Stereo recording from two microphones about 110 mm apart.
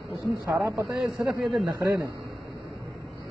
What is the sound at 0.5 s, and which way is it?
Speech, 25° right (ahead or behind).